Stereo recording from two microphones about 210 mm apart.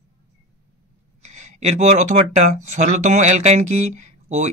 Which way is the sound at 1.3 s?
35° right (ahead or behind).